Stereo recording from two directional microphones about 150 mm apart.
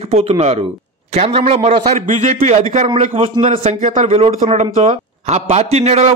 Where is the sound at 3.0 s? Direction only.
40° right (ahead or behind).